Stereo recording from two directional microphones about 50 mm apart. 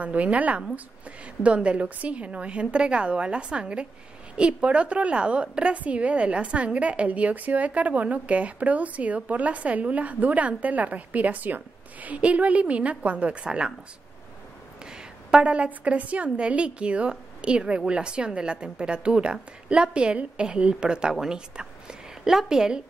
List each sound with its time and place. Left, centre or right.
0.0 s a woman's voice: right
14.9 s a woman's voice: right